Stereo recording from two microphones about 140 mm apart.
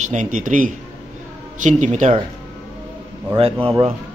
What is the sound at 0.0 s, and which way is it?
Speech, 60° right (ahead or behind).